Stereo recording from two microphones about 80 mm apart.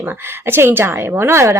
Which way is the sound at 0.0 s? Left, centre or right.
Right.